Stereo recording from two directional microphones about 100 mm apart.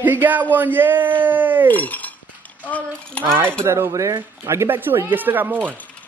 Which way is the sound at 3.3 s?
25° right (ahead or behind).